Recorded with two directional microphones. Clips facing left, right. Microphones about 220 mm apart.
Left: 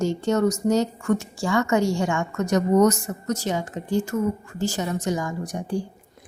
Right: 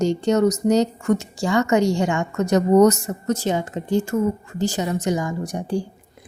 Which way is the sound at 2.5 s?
35° right (ahead or behind).